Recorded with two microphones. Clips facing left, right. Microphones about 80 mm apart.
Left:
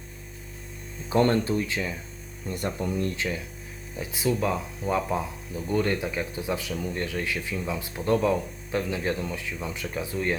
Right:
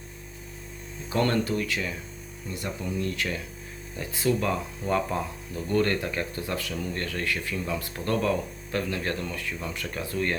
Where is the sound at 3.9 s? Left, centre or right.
Centre.